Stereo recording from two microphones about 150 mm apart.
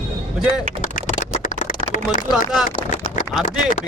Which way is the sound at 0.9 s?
60° left (ahead or behind).